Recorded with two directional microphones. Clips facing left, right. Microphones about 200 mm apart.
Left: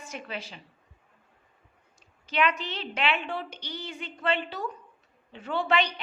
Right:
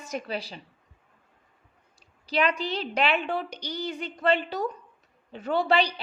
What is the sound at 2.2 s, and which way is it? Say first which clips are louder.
A woman's voice: right 2 dB; 35° right (ahead or behind).